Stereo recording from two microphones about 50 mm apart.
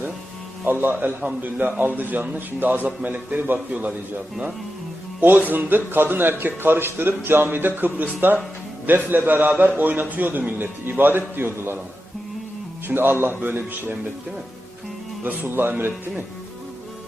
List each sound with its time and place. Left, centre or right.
0.6 s a man's voice: right
0.9 s a man's voice: right
5.2 s a man's voice: right
12.9 s a man's voice: right
15.2 s a man's voice: right